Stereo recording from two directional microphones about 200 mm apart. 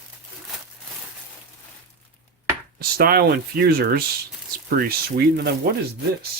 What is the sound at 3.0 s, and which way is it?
Speech, 50° right (ahead or behind).